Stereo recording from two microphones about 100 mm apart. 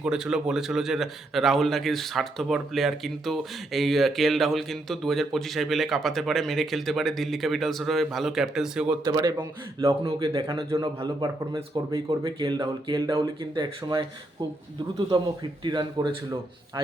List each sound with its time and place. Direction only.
0.0 s a man's voice: 5° right (ahead or behind)
9.0 s speech: 40° right (ahead or behind)
15.6 s speech: 50° right (ahead or behind)